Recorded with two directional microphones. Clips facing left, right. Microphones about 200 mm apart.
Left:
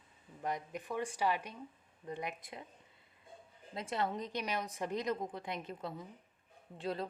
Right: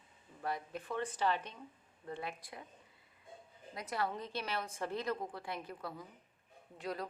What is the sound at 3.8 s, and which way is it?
A woman's voice, 25° left (ahead or behind).